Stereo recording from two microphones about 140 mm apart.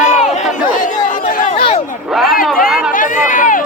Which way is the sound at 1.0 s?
70° left (ahead or behind).